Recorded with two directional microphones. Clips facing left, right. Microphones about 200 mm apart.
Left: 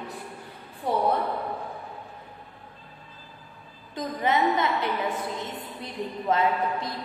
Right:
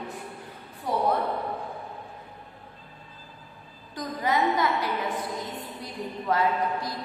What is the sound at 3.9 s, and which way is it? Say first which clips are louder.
A woman's voice: left 1 dB; 25° left (ahead or behind).